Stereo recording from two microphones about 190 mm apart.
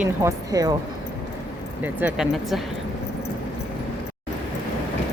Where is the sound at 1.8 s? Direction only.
10° right (ahead or behind).